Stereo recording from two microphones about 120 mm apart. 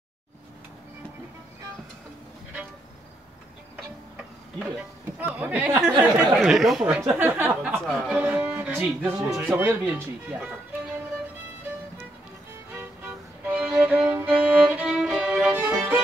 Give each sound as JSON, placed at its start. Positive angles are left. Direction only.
{"t": 5.2, "sound": "speech", "side_deg": -10}
{"t": 5.7, "sound": "speech", "side_deg": -20}
{"t": 6.4, "sound": "speech", "side_deg": 0}
{"t": 7.0, "sound": "speech", "side_deg": -15}
{"t": 8.1, "sound": "music", "side_deg": -10}
{"t": 9.4, "sound": "speech", "side_deg": -15}
{"t": 12.7, "sound": "violin", "side_deg": -15}